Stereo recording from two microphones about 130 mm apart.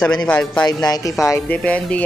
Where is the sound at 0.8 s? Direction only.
30° left (ahead or behind).